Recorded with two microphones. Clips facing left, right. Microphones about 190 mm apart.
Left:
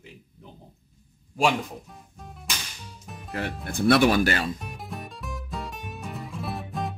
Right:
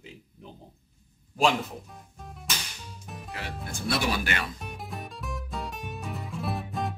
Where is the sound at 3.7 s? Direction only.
60° left (ahead or behind).